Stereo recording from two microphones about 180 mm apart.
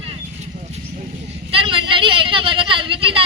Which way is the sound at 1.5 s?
30° right (ahead or behind).